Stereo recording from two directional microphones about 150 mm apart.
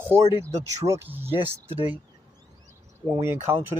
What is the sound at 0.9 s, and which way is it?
Speech, 10° right (ahead or behind).